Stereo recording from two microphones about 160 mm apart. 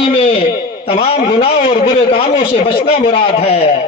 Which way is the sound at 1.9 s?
40° left (ahead or behind).